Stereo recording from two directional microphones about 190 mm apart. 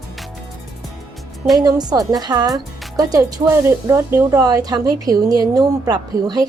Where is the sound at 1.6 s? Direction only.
20° right (ahead or behind).